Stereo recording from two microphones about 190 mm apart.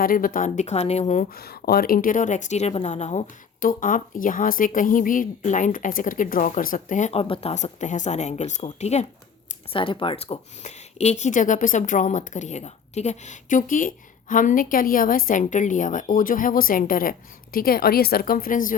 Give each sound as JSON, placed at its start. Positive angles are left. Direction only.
{"t": 0.0, "sound": "speech", "side_deg": 50}